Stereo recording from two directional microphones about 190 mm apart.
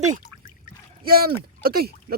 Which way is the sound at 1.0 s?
50° right (ahead or behind).